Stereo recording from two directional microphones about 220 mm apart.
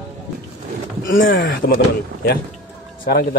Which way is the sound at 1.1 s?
40° left (ahead or behind).